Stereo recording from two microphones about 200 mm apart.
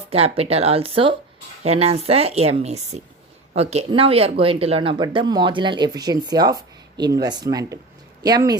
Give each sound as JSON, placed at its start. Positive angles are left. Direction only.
{"t": 0.1, "sound": "a woman's voice", "side_deg": -30}